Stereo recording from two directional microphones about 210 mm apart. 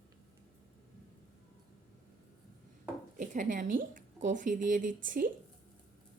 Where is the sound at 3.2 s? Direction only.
35° right (ahead or behind).